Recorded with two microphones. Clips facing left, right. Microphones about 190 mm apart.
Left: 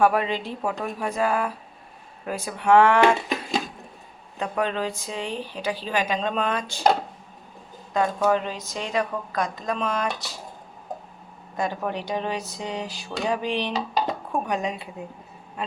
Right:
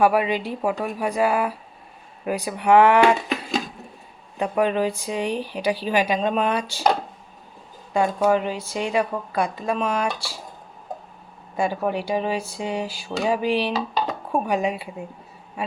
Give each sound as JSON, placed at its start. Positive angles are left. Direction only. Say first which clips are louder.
{"t": 0.0, "sound": "speech", "louder": "right 2 dB", "side_deg": -10}
{"t": 4.4, "sound": "speech", "louder": "right 5 dB", "side_deg": -10}
{"t": 7.9, "sound": "speech", "louder": "right 2 dB", "side_deg": -10}
{"t": 11.5, "sound": "speech", "louder": "right 4 dB", "side_deg": -10}